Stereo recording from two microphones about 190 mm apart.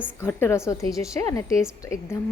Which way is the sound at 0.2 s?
15° left (ahead or behind).